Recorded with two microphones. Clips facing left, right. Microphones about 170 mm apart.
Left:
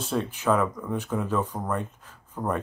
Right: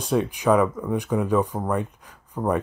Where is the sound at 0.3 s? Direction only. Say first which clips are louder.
Right 4 dB; 15° right (ahead or behind).